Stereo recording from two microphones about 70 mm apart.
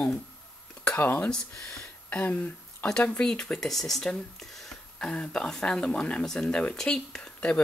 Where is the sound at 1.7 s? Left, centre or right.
Left.